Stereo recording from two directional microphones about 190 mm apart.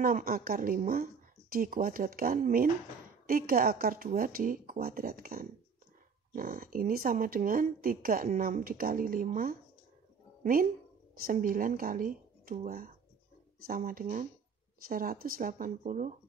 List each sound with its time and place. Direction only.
0.0 s speech: 50° right (ahead or behind)